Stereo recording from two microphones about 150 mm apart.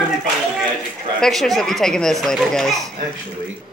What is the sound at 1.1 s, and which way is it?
Speech, centre (ahead or behind).